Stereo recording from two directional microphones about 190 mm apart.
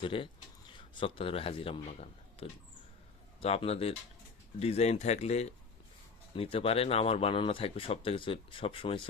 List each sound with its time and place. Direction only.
0.0 s speech: 25° left (ahead or behind)